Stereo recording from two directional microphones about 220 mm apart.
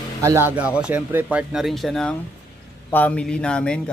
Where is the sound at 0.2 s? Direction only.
10° right (ahead or behind).